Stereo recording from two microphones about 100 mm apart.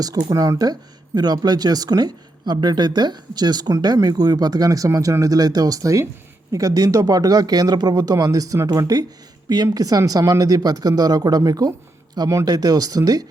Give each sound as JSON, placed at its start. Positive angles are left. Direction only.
{"t": 0.0, "sound": "speech", "side_deg": -40}